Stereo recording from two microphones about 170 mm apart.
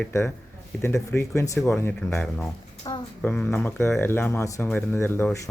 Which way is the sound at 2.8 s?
30° left (ahead or behind).